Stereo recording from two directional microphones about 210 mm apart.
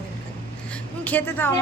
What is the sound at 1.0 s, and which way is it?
Speech, 10° left (ahead or behind).